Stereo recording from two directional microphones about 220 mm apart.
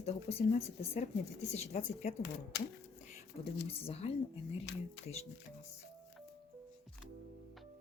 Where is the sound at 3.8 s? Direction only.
25° left (ahead or behind).